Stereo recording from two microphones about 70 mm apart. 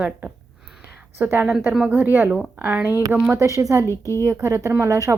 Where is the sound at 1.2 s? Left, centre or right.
Right.